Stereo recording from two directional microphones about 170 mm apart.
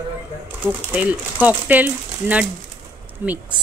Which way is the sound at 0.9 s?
10° right (ahead or behind).